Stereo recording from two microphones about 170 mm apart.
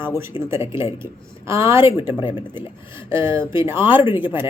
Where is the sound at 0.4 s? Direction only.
30° left (ahead or behind).